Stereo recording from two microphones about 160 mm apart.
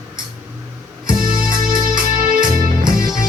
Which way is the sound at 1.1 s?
60° right (ahead or behind).